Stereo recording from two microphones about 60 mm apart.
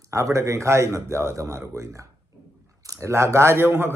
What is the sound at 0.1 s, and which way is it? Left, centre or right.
A man's voice, right.